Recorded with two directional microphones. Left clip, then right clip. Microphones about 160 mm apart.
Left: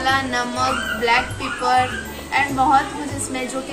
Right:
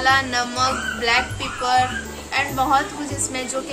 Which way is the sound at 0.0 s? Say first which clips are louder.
Right 1 dB; 40° right (ahead or behind).